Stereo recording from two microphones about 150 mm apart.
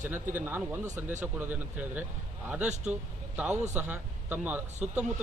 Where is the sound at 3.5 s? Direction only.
50° right (ahead or behind).